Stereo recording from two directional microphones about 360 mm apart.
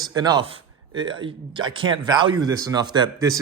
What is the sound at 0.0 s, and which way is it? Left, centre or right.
Speech, centre.